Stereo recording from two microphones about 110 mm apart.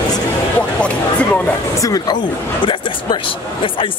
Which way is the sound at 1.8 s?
35° left (ahead or behind).